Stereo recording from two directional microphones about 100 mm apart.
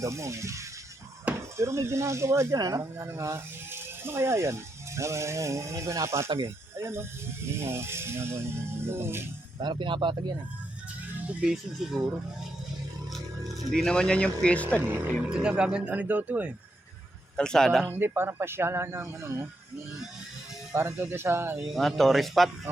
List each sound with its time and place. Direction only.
0.0 s speech: 30° right (ahead or behind)
9.6 s speech: 50° right (ahead or behind)
11.3 s speech: 15° right (ahead or behind)
13.1 s speech: centre (ahead or behind)
14.8 s speech: 20° right (ahead or behind)
15.3 s speech: 10° right (ahead or behind)
17.3 s speech: 5° left (ahead or behind)
17.8 s speech: 20° right (ahead or behind)
20.7 s speech: 25° right (ahead or behind)
21.6 s speech: centre (ahead or behind)